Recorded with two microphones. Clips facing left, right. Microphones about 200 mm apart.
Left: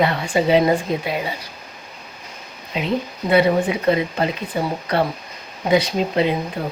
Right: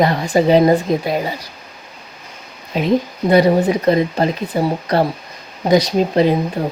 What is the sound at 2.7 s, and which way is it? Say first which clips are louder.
Speech: right 6 dB; 40° right (ahead or behind).